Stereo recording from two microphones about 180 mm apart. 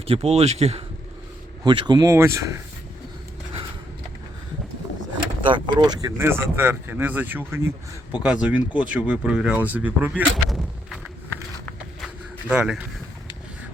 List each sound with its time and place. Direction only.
0.1 s speech: 35° right (ahead or behind)
1.6 s speech: 25° right (ahead or behind)
5.5 s speech: 25° right (ahead or behind); by 10.6 s 10° right (ahead or behind)
11.6 s a sound: centre (ahead or behind)